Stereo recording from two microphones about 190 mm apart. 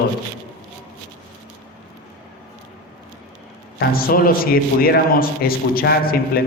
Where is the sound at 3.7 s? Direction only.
50° left (ahead or behind).